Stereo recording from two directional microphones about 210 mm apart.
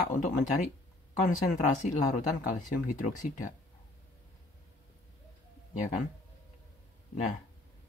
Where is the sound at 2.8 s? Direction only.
35° left (ahead or behind).